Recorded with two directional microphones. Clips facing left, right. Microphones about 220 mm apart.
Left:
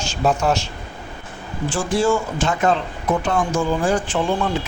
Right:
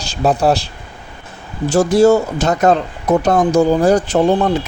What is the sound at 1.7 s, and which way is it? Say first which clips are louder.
Speech: right 9 dB; 40° right (ahead or behind).